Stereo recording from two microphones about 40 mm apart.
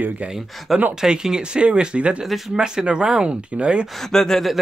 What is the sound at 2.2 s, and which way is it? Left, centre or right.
Speech, centre.